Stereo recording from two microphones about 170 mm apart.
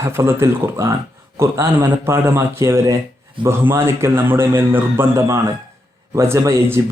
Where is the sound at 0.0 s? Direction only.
15° right (ahead or behind).